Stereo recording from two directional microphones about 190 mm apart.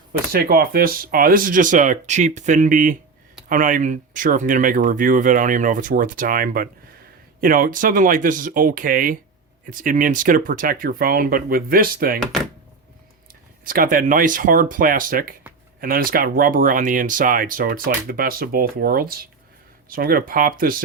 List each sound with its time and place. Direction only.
0.3 s speech: 50° right (ahead or behind)
13.7 s speech: 45° right (ahead or behind)